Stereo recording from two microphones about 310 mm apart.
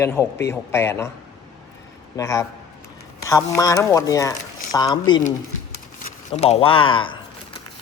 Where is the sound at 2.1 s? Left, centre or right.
Centre.